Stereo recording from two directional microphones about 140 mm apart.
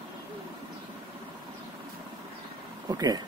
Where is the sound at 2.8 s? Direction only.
30° right (ahead or behind).